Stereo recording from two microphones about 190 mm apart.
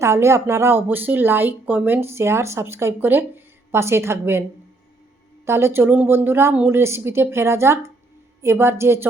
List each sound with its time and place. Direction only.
0.0 s speech: 15° right (ahead or behind)
5.5 s speech: 15° right (ahead or behind)